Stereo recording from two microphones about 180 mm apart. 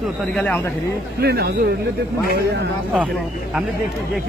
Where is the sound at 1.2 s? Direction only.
60° right (ahead or behind).